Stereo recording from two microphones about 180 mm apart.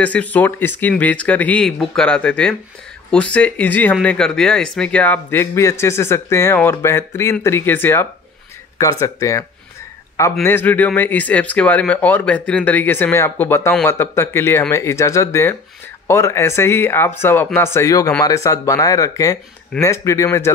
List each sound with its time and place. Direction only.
0.0 s speech: 10° left (ahead or behind)